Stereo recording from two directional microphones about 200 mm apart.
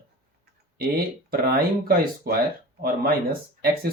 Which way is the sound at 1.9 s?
50° right (ahead or behind).